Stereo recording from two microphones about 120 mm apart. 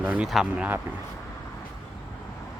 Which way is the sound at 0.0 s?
10° right (ahead or behind).